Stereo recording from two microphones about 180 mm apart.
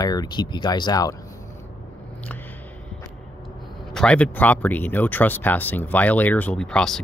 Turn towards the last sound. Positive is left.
turn(degrees=5)  # may be behind; listen again after turning